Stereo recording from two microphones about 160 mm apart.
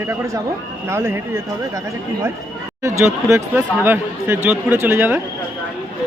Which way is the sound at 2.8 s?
20° right (ahead or behind).